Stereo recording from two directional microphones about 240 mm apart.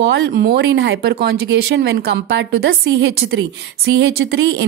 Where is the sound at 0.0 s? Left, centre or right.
Right.